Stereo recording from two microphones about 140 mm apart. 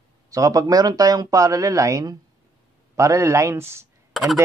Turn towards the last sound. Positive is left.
turn(degrees=0)  # may be behind; listen again after turning